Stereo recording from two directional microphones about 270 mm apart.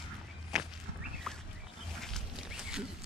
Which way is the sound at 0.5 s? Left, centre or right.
Centre.